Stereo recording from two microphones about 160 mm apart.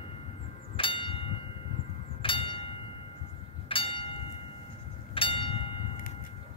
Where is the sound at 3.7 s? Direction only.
35° left (ahead or behind).